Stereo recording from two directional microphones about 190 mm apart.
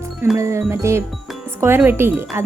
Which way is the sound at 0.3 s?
15° right (ahead or behind).